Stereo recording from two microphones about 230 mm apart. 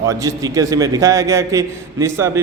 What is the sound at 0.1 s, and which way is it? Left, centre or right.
A man's voice, centre.